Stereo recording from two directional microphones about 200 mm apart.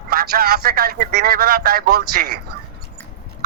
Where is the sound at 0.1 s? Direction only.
50° right (ahead or behind).